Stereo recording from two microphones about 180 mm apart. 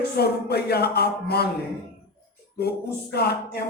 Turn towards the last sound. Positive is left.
turn(degrees=65)  # may be behind; listen again after turning